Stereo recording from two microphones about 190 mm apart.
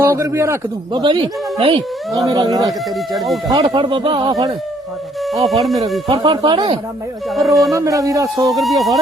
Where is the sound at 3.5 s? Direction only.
20° right (ahead or behind).